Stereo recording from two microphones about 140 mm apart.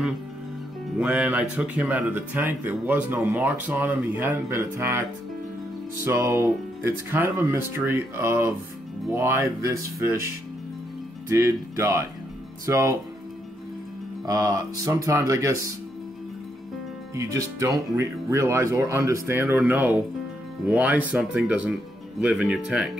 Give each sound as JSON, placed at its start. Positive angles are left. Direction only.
{"t": 0.9, "sound": "speech", "side_deg": -5}
{"t": 6.0, "sound": "speech", "side_deg": -20}
{"t": 11.2, "sound": "speech", "side_deg": -20}
{"t": 14.2, "sound": "speech", "side_deg": -25}
{"t": 17.1, "sound": "speech", "side_deg": -20}